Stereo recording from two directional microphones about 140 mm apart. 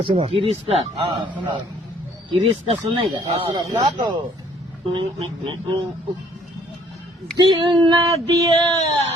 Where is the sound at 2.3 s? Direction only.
45° right (ahead or behind).